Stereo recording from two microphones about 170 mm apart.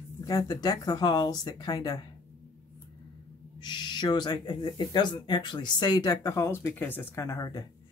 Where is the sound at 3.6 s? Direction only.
25° left (ahead or behind).